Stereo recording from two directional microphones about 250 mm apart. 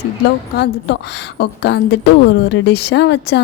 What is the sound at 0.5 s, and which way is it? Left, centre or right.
A woman's voice, left.